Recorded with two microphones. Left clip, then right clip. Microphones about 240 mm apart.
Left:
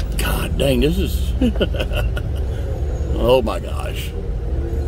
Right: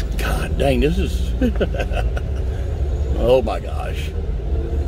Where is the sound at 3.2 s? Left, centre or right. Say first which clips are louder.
Even; left.